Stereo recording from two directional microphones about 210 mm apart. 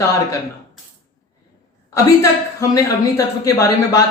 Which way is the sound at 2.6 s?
15° left (ahead or behind).